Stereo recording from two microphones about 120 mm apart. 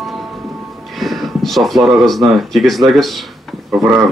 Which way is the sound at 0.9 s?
Centre (ahead or behind).